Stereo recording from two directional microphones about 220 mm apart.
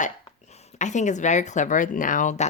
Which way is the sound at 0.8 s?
35° left (ahead or behind).